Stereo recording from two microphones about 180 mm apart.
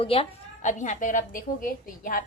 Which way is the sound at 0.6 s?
45° left (ahead or behind).